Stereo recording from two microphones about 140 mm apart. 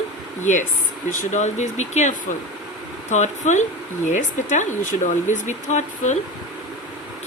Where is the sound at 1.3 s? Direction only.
55° left (ahead or behind).